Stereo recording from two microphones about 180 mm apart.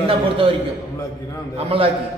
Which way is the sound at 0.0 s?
30° right (ahead or behind).